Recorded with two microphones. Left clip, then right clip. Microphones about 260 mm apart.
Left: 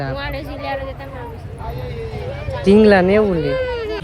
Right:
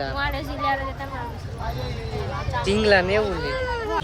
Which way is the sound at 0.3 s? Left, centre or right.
Centre.